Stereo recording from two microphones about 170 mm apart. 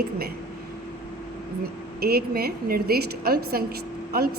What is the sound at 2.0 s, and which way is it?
A woman's voice, 65° right (ahead or behind).